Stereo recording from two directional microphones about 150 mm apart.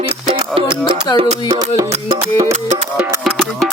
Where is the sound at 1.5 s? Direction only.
20° right (ahead or behind).